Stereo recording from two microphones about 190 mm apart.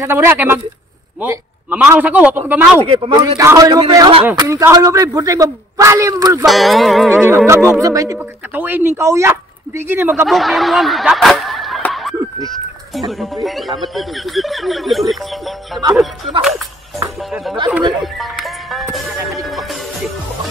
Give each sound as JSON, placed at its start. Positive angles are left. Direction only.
{"t": 0.0, "sound": "speech", "side_deg": -10}
{"t": 2.8, "sound": "speech", "side_deg": -30}
{"t": 6.4, "sound": "speech", "side_deg": 0}
{"t": 7.2, "sound": "speech", "side_deg": -15}
{"t": 10.2, "sound": "speech", "side_deg": 0}
{"t": 13.2, "sound": "speech", "side_deg": 0}
{"t": 18.0, "sound": "music", "side_deg": 0}